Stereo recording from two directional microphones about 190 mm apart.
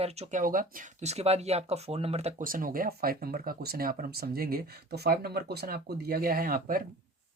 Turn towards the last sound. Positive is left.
turn(degrees=-50)  # may be behind; listen again after turning